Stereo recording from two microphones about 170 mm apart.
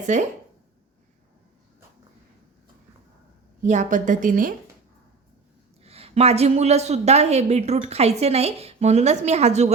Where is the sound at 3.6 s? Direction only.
45° right (ahead or behind).